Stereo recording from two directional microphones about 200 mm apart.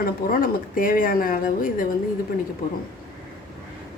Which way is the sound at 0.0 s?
45° left (ahead or behind).